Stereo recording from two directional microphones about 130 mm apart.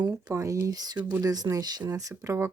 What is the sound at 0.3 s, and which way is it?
Speech, 25° right (ahead or behind).